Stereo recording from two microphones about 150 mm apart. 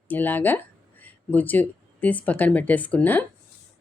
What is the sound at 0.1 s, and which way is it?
Speech, 10° left (ahead or behind).